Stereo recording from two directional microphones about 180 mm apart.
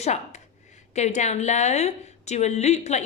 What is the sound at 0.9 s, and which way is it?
A woman's voice, 40° left (ahead or behind).